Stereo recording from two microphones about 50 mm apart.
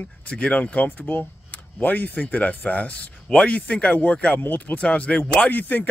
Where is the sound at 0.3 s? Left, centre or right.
Left.